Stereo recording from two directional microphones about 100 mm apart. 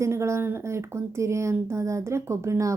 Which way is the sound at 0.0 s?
30° right (ahead or behind).